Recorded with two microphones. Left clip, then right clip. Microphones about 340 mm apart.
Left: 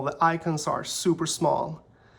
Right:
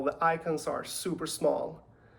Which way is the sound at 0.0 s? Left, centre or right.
Centre.